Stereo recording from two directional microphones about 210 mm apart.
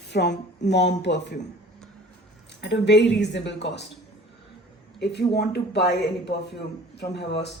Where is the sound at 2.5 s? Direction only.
55° left (ahead or behind).